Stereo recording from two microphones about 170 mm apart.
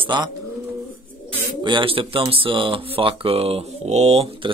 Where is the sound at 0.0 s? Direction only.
25° right (ahead or behind).